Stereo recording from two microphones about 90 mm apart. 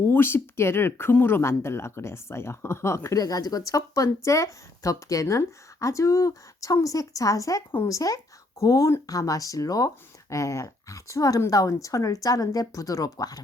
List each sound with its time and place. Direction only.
0.0 s speech: 25° left (ahead or behind); by 13.4 s 45° left (ahead or behind)